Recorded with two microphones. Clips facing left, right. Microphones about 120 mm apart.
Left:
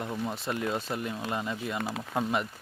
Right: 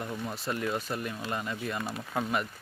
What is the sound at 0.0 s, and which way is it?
Speech, 20° left (ahead or behind).